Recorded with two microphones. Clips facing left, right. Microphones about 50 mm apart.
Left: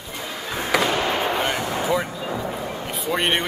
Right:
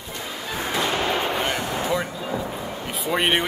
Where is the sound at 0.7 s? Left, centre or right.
Left.